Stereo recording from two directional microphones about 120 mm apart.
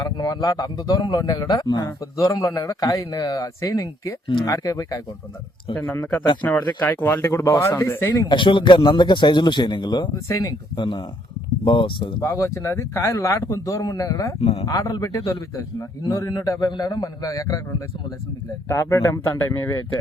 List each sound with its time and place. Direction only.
0.0 s a man's voice: 35° left (ahead or behind)
5.7 s speech: 15° left (ahead or behind)
8.1 s a man's voice: 40° left (ahead or behind)
10.2 s speech: 30° left (ahead or behind)
11.6 s a man's voice: 45° left (ahead or behind)
12.2 s speech: 20° left (ahead or behind)